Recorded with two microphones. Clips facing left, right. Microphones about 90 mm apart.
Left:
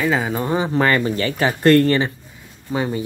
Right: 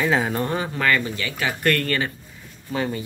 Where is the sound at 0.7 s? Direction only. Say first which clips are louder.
Left 5 dB; 30° left (ahead or behind).